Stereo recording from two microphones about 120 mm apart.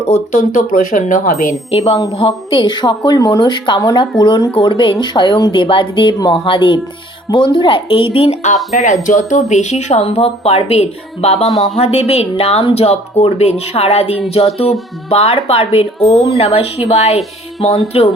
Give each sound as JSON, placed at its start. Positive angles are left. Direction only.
{"t": 0.1, "sound": "speech", "side_deg": 90}
{"t": 1.7, "sound": "a woman's voice", "side_deg": 55}
{"t": 4.5, "sound": "a woman's voice", "side_deg": 45}
{"t": 8.8, "sound": "speech", "side_deg": 90}